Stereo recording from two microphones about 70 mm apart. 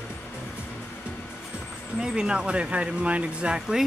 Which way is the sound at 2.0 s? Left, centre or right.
Centre.